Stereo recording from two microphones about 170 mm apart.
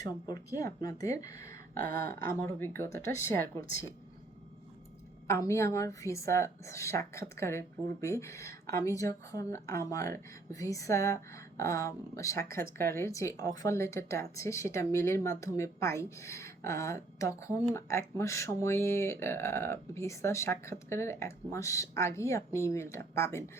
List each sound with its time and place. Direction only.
0.0 s a woman's voice: 20° left (ahead or behind)
5.3 s a woman's voice: 15° left (ahead or behind)